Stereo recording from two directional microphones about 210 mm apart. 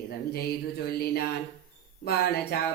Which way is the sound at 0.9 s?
50° left (ahead or behind).